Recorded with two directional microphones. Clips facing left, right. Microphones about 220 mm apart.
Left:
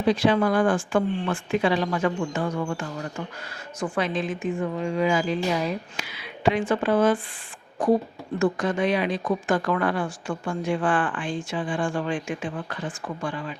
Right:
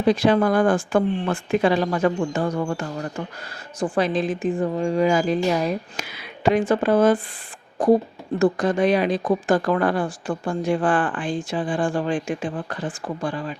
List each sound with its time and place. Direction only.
0.1 s speech: 45° right (ahead or behind)